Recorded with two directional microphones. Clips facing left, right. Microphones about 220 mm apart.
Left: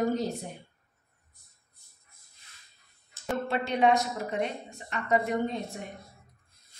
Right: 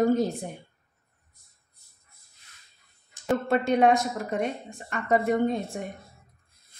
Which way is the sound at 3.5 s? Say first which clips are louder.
Right 3 dB; 50° right (ahead or behind).